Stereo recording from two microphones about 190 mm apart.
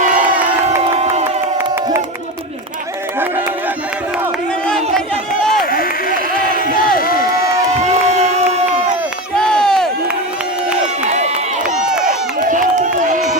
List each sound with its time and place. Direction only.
0.0 s crowd: 40° right (ahead or behind)
4.6 s crowd: 5° left (ahead or behind)
6.6 s crowd: 50° left (ahead or behind)
7.8 s crowd: 35° right (ahead or behind)
9.3 s run: 5° left (ahead or behind)
11.1 s run: 35° right (ahead or behind)
11.6 s a sound: 5° right (ahead or behind)
12.0 s run: 45° right (ahead or behind)